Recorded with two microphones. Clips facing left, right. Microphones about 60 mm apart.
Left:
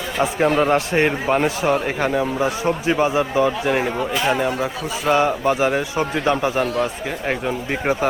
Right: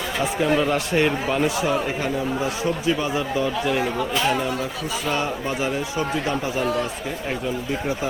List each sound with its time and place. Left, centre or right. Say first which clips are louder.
0.2 s speech: left 4 dB; left
3.7 s speech: left 3 dB; left
3.9 s speech: left 1 dB; centre
4.3 s speech: left 3 dB; left